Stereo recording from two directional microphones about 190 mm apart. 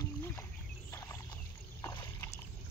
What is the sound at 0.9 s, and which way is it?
Rowboat, 15° left (ahead or behind).